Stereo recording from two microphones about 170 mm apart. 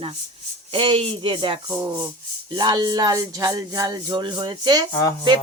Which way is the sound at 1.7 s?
20° right (ahead or behind).